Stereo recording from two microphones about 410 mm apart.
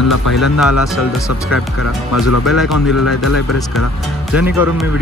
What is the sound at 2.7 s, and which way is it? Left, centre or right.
Speech, left.